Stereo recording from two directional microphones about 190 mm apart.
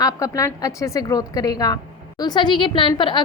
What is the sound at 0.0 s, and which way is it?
A woman's voice, 15° left (ahead or behind).